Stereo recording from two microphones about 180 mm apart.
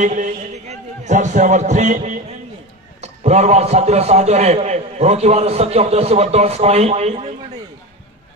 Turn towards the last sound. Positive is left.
turn(degrees=-35)  # may be behind; listen again after turning